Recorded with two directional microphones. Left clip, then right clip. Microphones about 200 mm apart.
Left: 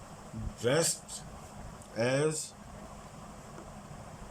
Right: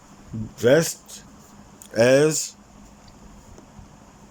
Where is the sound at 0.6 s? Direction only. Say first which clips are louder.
Right 11 dB; 45° right (ahead or behind).